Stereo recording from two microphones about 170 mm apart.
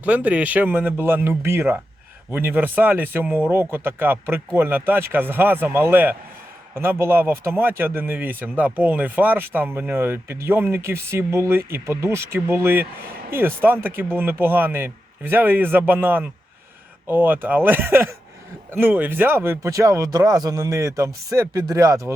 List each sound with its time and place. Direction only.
0.0 s speech: 10° right (ahead or behind)